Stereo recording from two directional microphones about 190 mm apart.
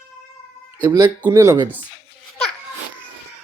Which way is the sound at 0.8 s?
20° right (ahead or behind).